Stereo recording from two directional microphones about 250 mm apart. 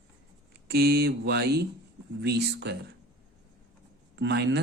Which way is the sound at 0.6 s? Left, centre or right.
Right.